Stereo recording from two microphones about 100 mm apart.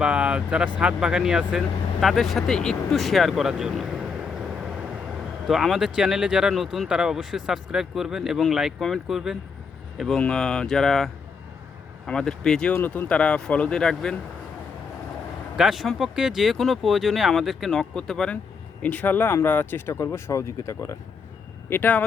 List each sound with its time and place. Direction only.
0.0 s speech: 10° right (ahead or behind)
10.2 s speech: 10° left (ahead or behind)
12.7 s speech: 20° left (ahead or behind)
15.5 s speech: 5° right (ahead or behind); by 20.9 s 30° left (ahead or behind)
21.7 s speech: 20° left (ahead or behind)